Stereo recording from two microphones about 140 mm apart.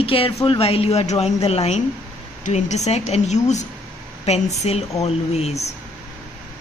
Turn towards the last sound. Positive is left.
turn(degrees=50)  # may be behind; listen again after turning